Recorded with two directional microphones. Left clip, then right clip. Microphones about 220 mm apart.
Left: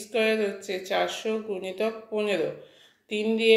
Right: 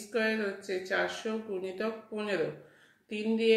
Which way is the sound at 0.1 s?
10° left (ahead or behind).